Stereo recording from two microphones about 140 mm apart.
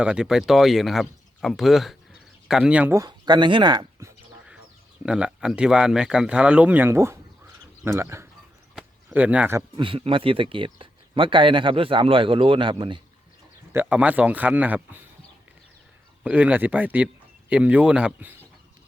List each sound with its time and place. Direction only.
0.0 s speech: 5° right (ahead or behind)
2.9 s speech: 30° right (ahead or behind)
5.0 s speech: 5° right (ahead or behind)
9.6 s speech: 35° right (ahead or behind)
13.7 s speech: 10° right (ahead or behind)
16.2 s speech: 10° right (ahead or behind)